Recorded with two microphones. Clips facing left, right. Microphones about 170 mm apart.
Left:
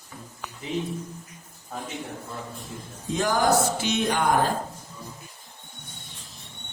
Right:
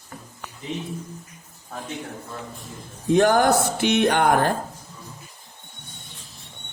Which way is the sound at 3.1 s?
60° right (ahead or behind).